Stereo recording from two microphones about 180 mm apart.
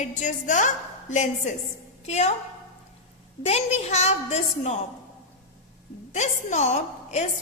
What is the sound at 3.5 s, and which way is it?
A woman's voice, 35° left (ahead or behind).